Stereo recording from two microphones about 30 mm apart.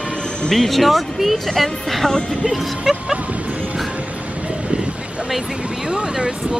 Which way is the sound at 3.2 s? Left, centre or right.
Right.